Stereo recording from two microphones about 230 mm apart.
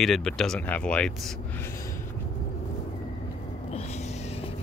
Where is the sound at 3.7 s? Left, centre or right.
Left.